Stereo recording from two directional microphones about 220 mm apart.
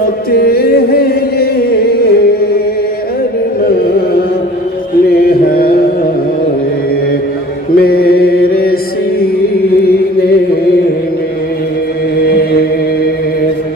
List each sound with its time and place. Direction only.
0.3 s music: 45° left (ahead or behind)
5.5 s carnatic music: 45° left (ahead or behind)
7.7 s mantra: 45° left (ahead or behind)
12.3 s chant: 45° left (ahead or behind)